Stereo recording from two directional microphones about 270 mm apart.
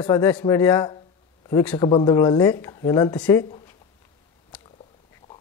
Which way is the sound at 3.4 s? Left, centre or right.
Centre.